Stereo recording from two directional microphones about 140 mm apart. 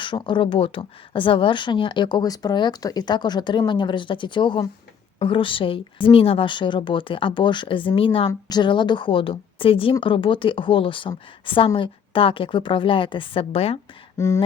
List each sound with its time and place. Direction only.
0.0 s a woman's voice: 35° left (ahead or behind)
8.3 s a woman's voice: 30° left (ahead or behind); by 13.7 s 45° left (ahead or behind)
14.2 s a sound: 20° left (ahead or behind)